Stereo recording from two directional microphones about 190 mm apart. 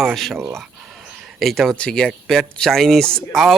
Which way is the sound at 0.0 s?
Centre (ahead or behind).